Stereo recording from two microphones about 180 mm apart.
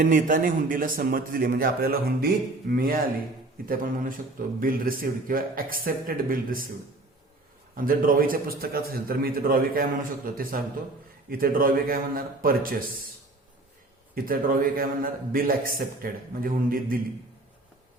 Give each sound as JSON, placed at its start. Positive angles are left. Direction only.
{"t": 0.1, "sound": "a man's voice", "side_deg": -45}
{"t": 7.8, "sound": "a man's voice", "side_deg": -50}
{"t": 14.3, "sound": "a man's voice", "side_deg": -50}